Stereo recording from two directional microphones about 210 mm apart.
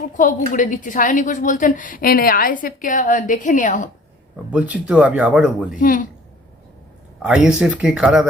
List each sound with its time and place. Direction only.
0.1 s a woman's voice: 35° left (ahead or behind)
4.5 s speech: 5° right (ahead or behind)
5.8 s a woman's voice: 40° left (ahead or behind)
7.2 s speech: 5° right (ahead or behind)